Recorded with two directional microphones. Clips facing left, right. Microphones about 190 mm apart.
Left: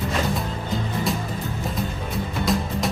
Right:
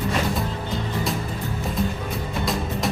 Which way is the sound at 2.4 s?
Centre (ahead or behind).